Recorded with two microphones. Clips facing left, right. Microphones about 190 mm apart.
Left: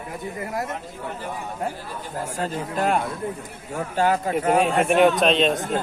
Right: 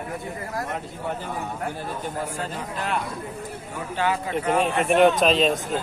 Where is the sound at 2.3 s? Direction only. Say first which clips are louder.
Left 4 dB; 45° left (ahead or behind).